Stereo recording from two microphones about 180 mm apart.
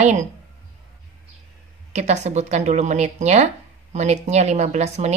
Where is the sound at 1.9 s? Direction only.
40° right (ahead or behind).